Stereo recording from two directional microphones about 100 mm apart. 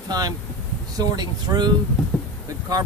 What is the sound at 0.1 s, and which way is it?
Speech, 40° right (ahead or behind).